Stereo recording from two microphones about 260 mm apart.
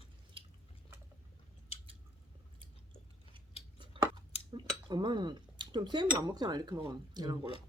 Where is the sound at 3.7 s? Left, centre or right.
Centre.